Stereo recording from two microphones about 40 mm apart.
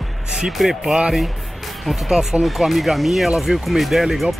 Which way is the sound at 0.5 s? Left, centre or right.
Centre.